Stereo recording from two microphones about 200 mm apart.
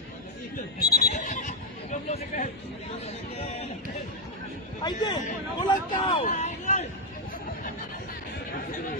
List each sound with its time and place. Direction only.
0.9 s neigh: 40° left (ahead or behind)
4.8 s a man's voice: 20° left (ahead or behind); by 6.9 s 35° left (ahead or behind)